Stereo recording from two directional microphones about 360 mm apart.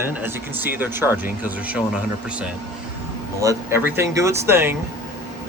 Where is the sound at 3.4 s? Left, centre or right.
Centre.